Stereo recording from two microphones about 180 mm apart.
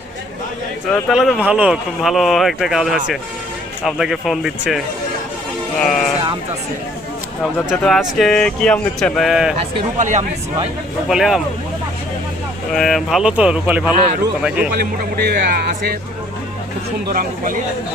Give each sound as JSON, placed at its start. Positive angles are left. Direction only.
{"t": 0.9, "sound": "speech", "side_deg": 0}
{"t": 5.8, "sound": "speech", "side_deg": 0}
{"t": 7.7, "sound": "speech", "side_deg": 0}
{"t": 9.6, "sound": "speech", "side_deg": -40}
{"t": 11.1, "sound": "speech", "side_deg": 0}
{"t": 12.7, "sound": "speech", "side_deg": 0}
{"t": 14.8, "sound": "speech", "side_deg": -55}
{"t": 17.2, "sound": "speech", "side_deg": -50}